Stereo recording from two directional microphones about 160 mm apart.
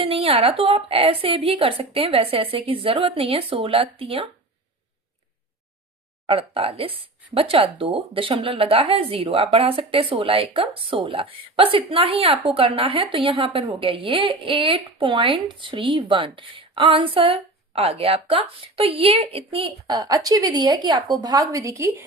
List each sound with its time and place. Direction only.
0.0 s speech: 35° right (ahead or behind)
6.2 s speech: 35° right (ahead or behind); by 22.0 s 15° right (ahead or behind)